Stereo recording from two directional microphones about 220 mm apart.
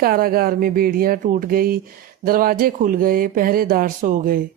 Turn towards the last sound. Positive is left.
turn(degrees=-40)  # may be behind; listen again after turning